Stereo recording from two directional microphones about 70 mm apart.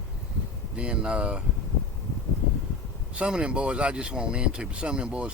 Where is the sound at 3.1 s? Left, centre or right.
Centre.